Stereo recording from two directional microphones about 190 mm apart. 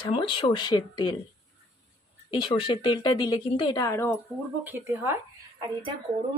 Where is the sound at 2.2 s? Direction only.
25° left (ahead or behind).